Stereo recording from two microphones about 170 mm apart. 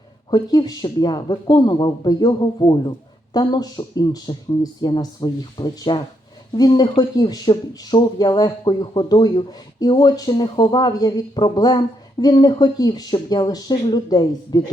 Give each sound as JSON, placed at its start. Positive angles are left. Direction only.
{"t": 0.3, "sound": "speech", "side_deg": 25}